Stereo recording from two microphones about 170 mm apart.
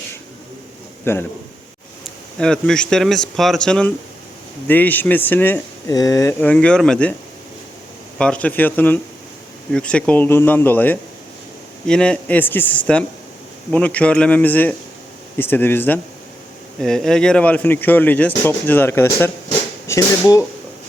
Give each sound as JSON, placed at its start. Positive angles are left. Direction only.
{"t": 1.1, "sound": "speech", "side_deg": 15}
{"t": 2.0, "sound": "speech", "side_deg": 5}
{"t": 8.2, "sound": "speech", "side_deg": 5}